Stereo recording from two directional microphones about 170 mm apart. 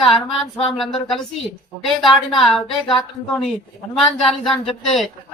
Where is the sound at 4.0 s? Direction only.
Centre (ahead or behind).